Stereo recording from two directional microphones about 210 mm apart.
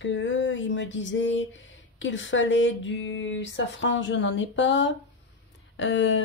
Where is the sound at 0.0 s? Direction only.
65° left (ahead or behind).